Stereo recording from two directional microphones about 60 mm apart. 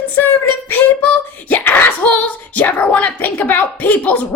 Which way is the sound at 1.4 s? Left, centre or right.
Left.